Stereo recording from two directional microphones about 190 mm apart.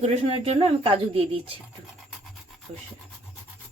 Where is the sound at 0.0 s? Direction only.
35° right (ahead or behind).